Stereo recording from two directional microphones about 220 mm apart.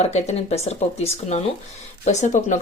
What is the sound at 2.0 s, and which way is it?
Speech, 30° left (ahead or behind).